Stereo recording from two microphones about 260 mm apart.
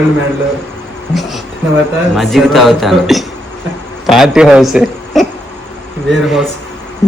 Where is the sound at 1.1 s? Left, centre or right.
Centre.